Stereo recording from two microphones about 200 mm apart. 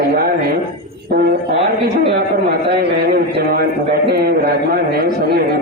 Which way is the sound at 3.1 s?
50° right (ahead or behind).